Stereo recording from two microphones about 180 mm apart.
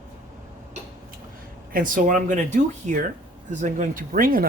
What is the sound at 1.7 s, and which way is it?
Speech, 50° right (ahead or behind).